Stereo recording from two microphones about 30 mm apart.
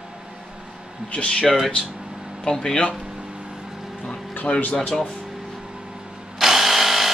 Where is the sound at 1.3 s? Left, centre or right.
Left.